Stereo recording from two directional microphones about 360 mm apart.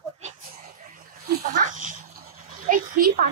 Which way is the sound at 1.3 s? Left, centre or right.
Right.